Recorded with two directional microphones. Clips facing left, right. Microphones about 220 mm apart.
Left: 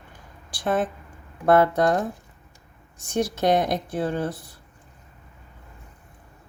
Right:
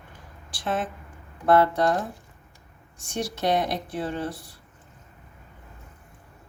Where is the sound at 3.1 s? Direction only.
45° left (ahead or behind).